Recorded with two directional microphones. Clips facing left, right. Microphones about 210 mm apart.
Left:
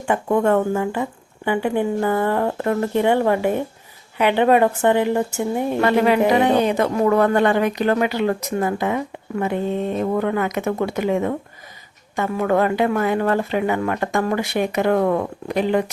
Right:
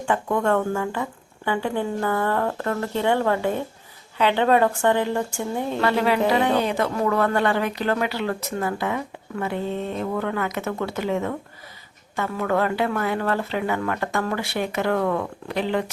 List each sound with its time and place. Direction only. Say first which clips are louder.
0.0 s a woman's voice: left 4 dB; 20° left (ahead or behind)